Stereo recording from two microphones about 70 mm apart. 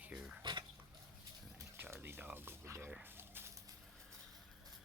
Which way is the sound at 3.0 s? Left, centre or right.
Right.